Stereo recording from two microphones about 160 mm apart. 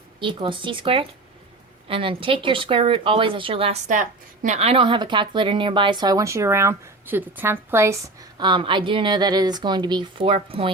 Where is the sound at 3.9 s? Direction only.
55° right (ahead or behind).